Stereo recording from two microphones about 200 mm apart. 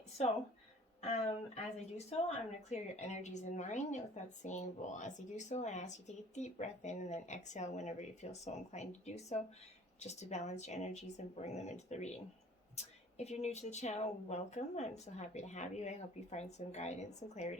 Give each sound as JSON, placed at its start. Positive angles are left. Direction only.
{"t": 1.0, "sound": "a woman's voice", "side_deg": 35}